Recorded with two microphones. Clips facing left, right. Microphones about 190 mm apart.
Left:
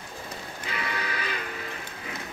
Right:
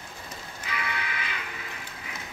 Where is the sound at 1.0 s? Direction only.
40° left (ahead or behind).